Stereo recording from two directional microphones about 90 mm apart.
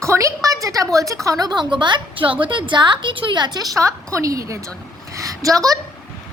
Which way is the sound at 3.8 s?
35° right (ahead or behind).